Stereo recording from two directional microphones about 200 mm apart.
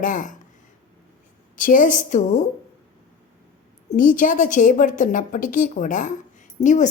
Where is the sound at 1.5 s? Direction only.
40° left (ahead or behind).